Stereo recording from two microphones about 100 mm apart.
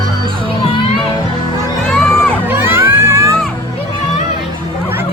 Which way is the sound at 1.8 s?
10° left (ahead or behind).